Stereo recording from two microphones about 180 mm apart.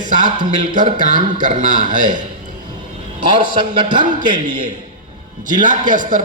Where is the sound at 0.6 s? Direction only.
45° right (ahead or behind).